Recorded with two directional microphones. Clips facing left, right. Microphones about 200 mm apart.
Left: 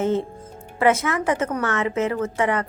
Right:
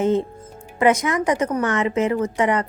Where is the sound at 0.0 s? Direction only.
15° right (ahead or behind).